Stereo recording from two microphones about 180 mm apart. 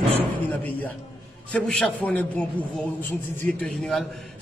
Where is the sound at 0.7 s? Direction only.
10° left (ahead or behind).